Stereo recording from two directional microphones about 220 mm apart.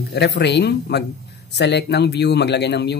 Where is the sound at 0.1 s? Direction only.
50° left (ahead or behind).